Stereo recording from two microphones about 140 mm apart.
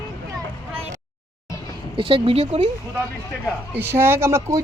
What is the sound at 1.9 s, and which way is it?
Speech, 40° right (ahead or behind).